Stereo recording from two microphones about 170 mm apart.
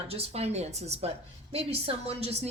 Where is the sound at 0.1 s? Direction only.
35° right (ahead or behind).